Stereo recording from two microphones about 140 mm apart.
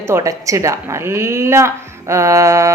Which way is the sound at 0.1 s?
20° right (ahead or behind).